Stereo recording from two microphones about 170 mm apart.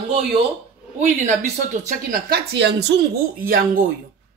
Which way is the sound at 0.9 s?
45° right (ahead or behind).